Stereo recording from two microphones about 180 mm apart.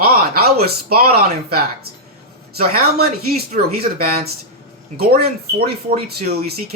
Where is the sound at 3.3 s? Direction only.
55° right (ahead or behind).